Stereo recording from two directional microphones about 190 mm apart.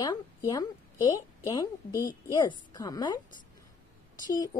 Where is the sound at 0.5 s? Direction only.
20° left (ahead or behind).